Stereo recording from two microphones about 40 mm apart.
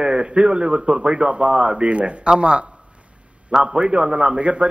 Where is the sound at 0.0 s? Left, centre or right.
Right.